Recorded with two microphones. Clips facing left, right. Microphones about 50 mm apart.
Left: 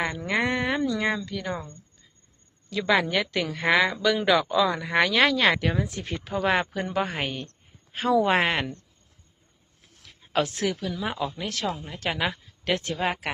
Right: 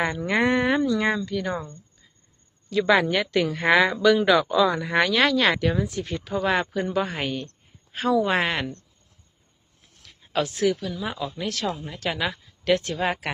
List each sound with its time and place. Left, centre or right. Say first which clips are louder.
0.0 s speech: right 3 dB; centre
5.9 s a woman's voice: right 3 dB; left; by 7.4 s centre
8.1 s speech: left 1 dB; left
10.3 s speech: right 3 dB; left
11.0 s a woman's voice: left 2 dB; left
12.9 s speech: right 1 dB; centre